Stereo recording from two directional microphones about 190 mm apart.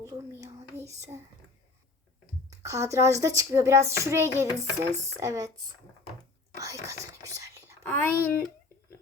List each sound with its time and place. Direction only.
0.1 s speech: 15° right (ahead or behind)
2.5 s speech: 15° right (ahead or behind)
6.6 s speech: 15° right (ahead or behind)
7.9 s speech: 10° left (ahead or behind)